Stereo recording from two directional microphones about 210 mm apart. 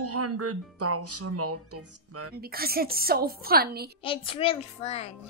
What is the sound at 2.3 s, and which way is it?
Speech, 45° right (ahead or behind).